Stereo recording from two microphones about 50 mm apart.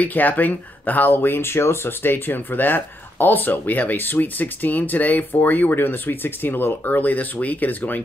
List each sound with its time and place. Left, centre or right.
0.0 s speech: left